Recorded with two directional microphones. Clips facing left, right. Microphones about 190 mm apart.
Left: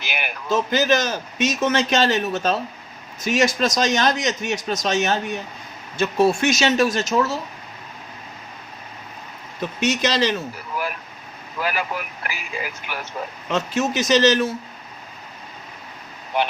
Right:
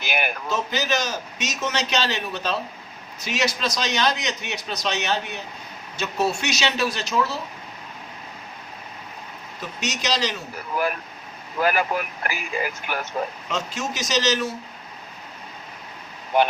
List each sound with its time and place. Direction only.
0.0 s a sound: 45° right (ahead or behind)
0.4 s a man's voice: 50° left (ahead or behind)
9.8 s a man's voice: 55° left (ahead or behind)
11.6 s speech: 50° right (ahead or behind)
13.5 s a man's voice: 55° left (ahead or behind)